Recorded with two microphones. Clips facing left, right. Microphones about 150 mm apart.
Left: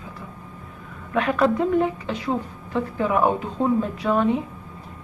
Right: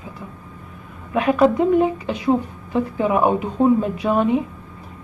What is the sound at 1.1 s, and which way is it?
A woman's voice, 15° right (ahead or behind).